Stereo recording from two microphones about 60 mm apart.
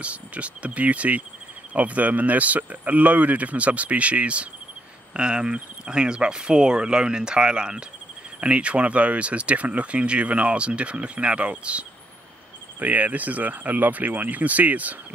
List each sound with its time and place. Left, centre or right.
0.0 s speech: right